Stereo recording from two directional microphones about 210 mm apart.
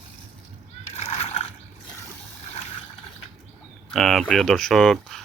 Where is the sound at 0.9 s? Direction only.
30° left (ahead or behind).